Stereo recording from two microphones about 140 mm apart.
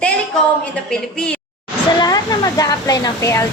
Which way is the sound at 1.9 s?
30° left (ahead or behind).